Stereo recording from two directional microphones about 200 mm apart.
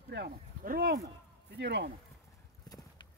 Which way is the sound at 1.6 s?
60° right (ahead or behind).